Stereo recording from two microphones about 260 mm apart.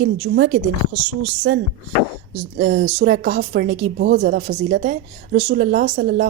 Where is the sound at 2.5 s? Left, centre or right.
Right.